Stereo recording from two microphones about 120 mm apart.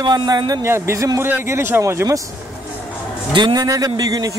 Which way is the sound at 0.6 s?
20° right (ahead or behind).